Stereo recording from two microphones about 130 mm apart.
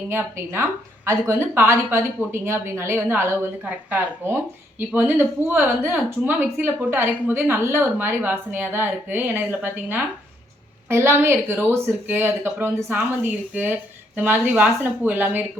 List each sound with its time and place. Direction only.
0.1 s a woman's voice: 20° right (ahead or behind)